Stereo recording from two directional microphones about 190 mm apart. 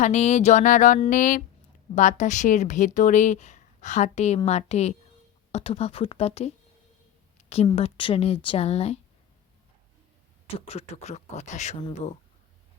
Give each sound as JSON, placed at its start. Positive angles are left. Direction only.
{"t": 0.0, "sound": "a woman's voice", "side_deg": 35}
{"t": 10.7, "sound": "a woman's voice", "side_deg": 35}